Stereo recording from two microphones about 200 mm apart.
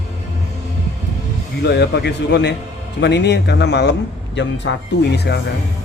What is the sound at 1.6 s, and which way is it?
Speech, 55° left (ahead or behind).